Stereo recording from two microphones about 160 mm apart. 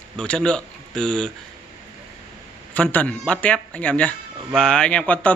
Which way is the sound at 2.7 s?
10° left (ahead or behind).